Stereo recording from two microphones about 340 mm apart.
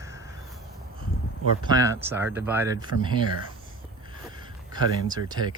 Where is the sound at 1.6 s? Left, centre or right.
Centre.